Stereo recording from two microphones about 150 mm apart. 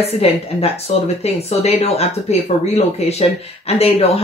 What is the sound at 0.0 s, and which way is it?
Speech, 40° left (ahead or behind).